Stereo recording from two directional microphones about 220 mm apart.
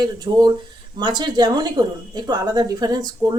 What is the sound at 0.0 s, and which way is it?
A woman's voice, 20° right (ahead or behind).